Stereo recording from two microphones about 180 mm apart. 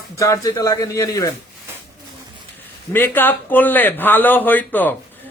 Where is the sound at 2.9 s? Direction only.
10° left (ahead or behind).